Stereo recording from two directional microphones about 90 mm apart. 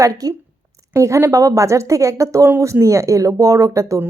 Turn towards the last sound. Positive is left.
turn(degrees=-35)  # may be behind; listen again after turning